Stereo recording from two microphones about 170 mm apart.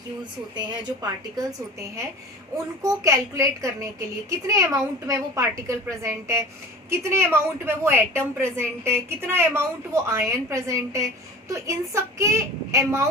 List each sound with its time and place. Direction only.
0.5 s a woman's voice: 25° right (ahead or behind)
2.8 s a woman's voice: 20° right (ahead or behind)